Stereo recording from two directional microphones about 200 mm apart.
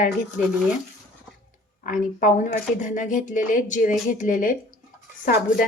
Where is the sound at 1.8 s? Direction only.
40° left (ahead or behind).